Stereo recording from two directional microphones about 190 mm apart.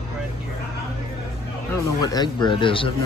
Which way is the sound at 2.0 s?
20° left (ahead or behind).